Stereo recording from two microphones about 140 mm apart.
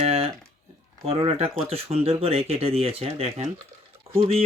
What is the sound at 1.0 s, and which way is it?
Speech, 45° right (ahead or behind).